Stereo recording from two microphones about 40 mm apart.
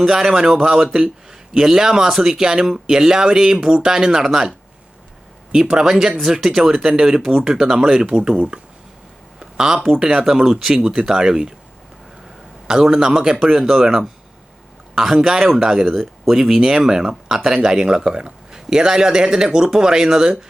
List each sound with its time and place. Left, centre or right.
0.0 s speech: centre
9.4 s a sound: centre
10.1 s speech: centre
12.6 s speech: centre
13.5 s speech: centre
14.9 s speech: centre
16.3 s speech: centre